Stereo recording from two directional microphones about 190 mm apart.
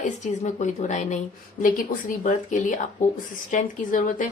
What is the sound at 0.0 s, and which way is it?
Speech, 40° left (ahead or behind).